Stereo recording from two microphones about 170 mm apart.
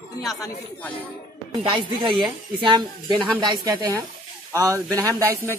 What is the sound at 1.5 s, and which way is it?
A woman's voice, 30° right (ahead or behind).